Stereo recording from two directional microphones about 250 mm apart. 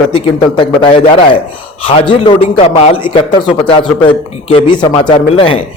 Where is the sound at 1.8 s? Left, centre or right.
Left.